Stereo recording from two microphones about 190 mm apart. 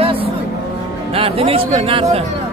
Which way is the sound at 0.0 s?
30° right (ahead or behind).